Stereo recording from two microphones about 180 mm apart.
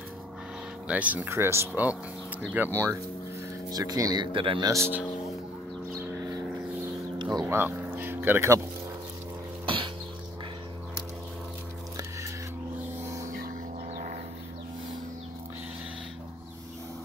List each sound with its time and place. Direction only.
0.8 s speech: 10° right (ahead or behind)
7.3 s speech: 15° right (ahead or behind)
9.7 s a sound: 30° right (ahead or behind)
13.0 s vehicle: 15° right (ahead or behind)